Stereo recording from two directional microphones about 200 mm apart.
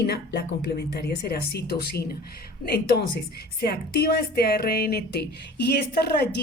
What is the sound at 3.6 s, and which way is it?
Speech, 50° left (ahead or behind).